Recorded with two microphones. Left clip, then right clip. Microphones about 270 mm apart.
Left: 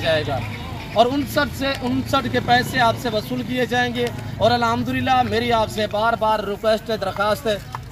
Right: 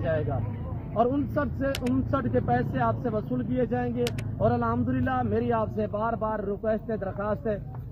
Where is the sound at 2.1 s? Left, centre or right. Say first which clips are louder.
Left 10 dB; centre.